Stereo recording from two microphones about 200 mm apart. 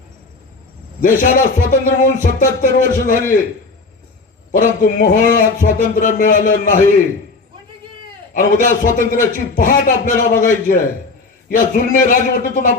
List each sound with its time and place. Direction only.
1.0 s a man's voice: 40° left (ahead or behind)
4.5 s a man's voice: 45° left (ahead or behind)
8.3 s a man's voice: 40° left (ahead or behind)